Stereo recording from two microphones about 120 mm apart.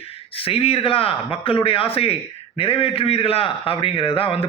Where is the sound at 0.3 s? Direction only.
50° left (ahead or behind).